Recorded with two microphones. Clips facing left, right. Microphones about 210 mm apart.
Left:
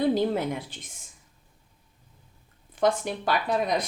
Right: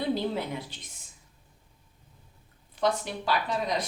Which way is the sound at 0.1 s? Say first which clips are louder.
Left 4 dB; 50° left (ahead or behind).